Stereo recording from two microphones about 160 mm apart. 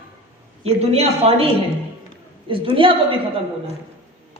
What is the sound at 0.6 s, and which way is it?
Speech, 40° right (ahead or behind).